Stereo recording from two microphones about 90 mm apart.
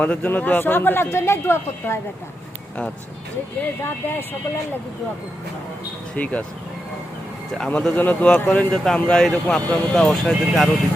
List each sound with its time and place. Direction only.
0.0 s speech: 15° left (ahead or behind)
3.8 s speech: 25° left (ahead or behind)
6.1 s a man's voice: 15° left (ahead or behind)
7.7 s a man's voice: 15° left (ahead or behind)